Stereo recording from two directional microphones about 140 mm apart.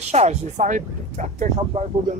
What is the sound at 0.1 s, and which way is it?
Speech, 55° right (ahead or behind).